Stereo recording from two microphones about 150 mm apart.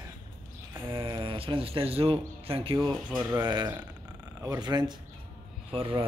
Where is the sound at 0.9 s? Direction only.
35° right (ahead or behind).